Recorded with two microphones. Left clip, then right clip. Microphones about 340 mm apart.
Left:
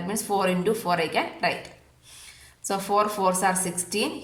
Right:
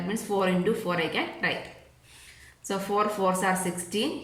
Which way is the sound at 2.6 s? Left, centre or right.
Centre.